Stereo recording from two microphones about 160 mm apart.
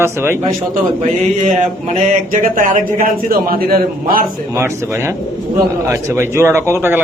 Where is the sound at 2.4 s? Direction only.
55° right (ahead or behind).